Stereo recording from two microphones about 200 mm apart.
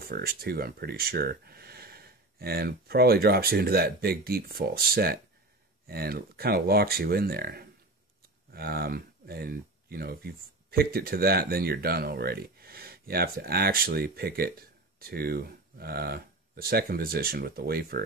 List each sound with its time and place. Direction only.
0.0 s speech: 50° right (ahead or behind)